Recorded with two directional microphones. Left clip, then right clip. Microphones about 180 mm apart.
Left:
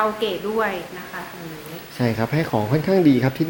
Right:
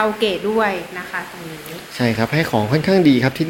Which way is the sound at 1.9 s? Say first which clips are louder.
Right 4 dB; centre (ahead or behind).